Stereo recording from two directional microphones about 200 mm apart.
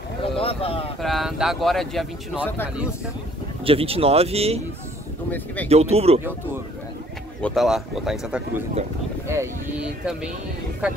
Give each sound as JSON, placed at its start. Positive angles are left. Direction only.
{"t": 0.2, "sound": "boat", "side_deg": 30}
{"t": 1.0, "sound": "speech", "side_deg": 0}
{"t": 3.6, "sound": "speech", "side_deg": -30}
{"t": 5.7, "sound": "speech", "side_deg": -30}
{"t": 7.4, "sound": "speech", "side_deg": 0}
{"t": 9.3, "sound": "speech", "side_deg": -15}